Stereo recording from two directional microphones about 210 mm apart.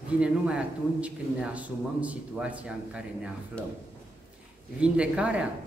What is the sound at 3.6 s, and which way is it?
Speech, 5° left (ahead or behind).